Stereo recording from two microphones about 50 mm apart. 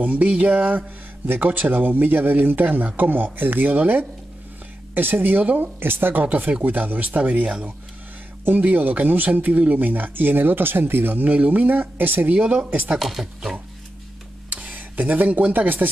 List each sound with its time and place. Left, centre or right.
0.0 s a sound: right
0.4 s speech: right
0.7 s speech: right
5.8 s speech: right
6.2 s speech: right
12.3 s speech: right
13.0 s speech: centre
14.5 s a sound: right